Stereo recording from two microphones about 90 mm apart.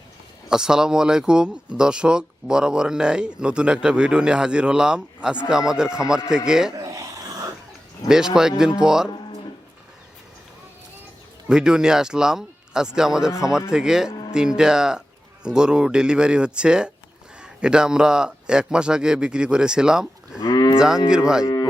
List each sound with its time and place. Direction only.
0.4 s speech: 5° right (ahead or behind)
6.7 s a sound: 40° right (ahead or behind)
8.0 s speech: 5° right (ahead or behind)
11.4 s a man's voice: 10° right (ahead or behind)
20.4 s speech: 50° left (ahead or behind)
20.7 s speech: 5° right (ahead or behind)
21.4 s cattle: 45° left (ahead or behind)